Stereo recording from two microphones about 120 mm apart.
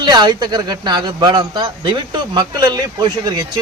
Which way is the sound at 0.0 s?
35° right (ahead or behind).